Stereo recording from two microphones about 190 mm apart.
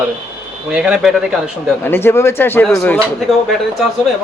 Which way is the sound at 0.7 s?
5° right (ahead or behind).